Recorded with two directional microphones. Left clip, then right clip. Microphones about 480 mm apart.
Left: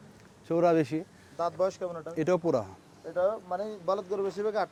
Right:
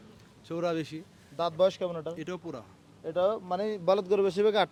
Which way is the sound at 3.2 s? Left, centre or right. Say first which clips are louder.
Right 1 dB; right.